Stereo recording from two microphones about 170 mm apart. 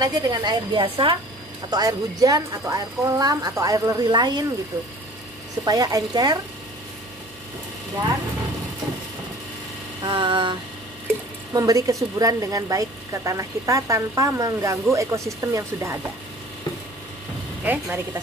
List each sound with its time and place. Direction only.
0.0 s speech: 25° right (ahead or behind)
5.7 s speech: 20° right (ahead or behind)
10.0 s speech: 30° right (ahead or behind)
17.6 s speech: 10° right (ahead or behind)